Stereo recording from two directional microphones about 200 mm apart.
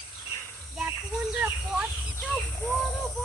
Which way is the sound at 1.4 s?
5° right (ahead or behind).